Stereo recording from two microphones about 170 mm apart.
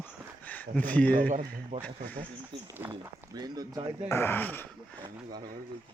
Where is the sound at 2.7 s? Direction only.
15° right (ahead or behind).